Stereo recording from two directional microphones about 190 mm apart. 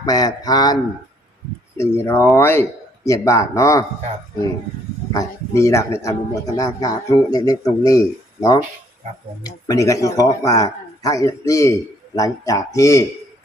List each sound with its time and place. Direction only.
0.0 s speech: 20° left (ahead or behind)
1.8 s speech: 15° left (ahead or behind)
5.1 s speech: 15° left (ahead or behind)